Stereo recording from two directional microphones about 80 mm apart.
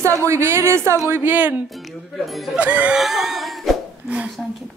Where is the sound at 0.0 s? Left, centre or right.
Right.